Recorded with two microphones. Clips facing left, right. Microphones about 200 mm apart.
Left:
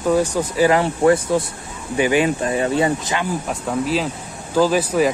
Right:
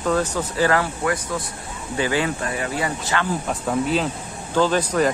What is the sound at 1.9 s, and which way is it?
Speech, 15° left (ahead or behind).